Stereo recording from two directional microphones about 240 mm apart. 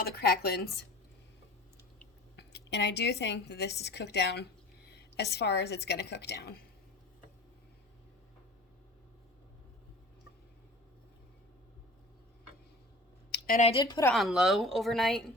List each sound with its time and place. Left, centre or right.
0.0 s speech: left
2.3 s a woman's voice: left
13.6 s speech: left
14.1 s speech: centre